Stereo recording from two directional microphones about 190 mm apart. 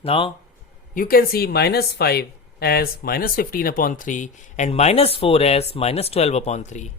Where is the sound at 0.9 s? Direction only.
50° left (ahead or behind).